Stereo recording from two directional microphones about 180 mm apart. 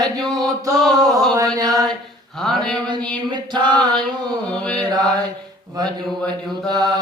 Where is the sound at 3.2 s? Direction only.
25° right (ahead or behind).